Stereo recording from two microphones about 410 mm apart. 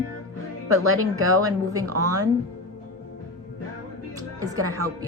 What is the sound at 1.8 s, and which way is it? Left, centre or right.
Speech, right.